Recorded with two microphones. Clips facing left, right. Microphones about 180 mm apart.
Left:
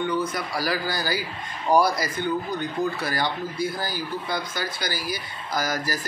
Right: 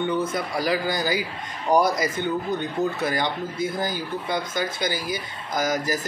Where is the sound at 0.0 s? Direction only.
25° right (ahead or behind).